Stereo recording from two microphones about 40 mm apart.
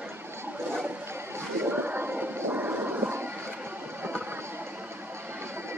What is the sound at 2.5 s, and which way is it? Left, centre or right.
Train, right.